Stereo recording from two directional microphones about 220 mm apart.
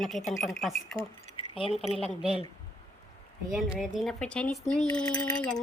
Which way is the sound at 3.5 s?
Centre (ahead or behind).